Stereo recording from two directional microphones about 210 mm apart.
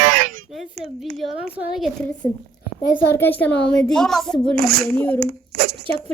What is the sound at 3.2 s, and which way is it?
A child's voice, 10° left (ahead or behind).